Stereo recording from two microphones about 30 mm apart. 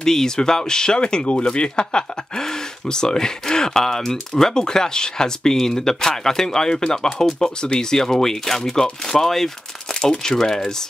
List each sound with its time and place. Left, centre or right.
0.0 s speech: centre